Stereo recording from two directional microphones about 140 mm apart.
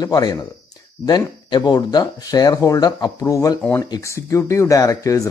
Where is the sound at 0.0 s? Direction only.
30° left (ahead or behind).